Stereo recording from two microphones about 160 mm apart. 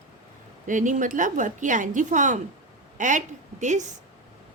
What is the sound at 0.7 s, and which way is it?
A woman's voice, 55° right (ahead or behind).